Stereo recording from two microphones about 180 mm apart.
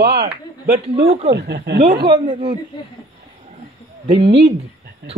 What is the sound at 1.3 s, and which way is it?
Speech, 65° right (ahead or behind).